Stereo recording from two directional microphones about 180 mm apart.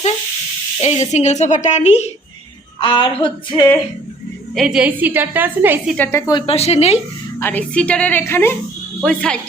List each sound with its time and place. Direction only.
0.8 s speech: 35° left (ahead or behind)
2.8 s a sound: 25° left (ahead or behind)
4.5 s a woman's voice: centre (ahead or behind)
6.0 s a woman's voice: 15° left (ahead or behind)
6.4 s speech: 35° left (ahead or behind)
7.3 s a woman's voice: 10° left (ahead or behind)